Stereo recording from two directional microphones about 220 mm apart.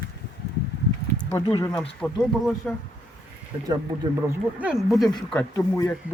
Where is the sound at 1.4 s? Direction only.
15° left (ahead or behind).